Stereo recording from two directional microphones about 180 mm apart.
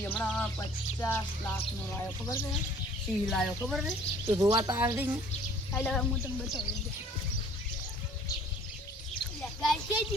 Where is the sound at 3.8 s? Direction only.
15° right (ahead or behind).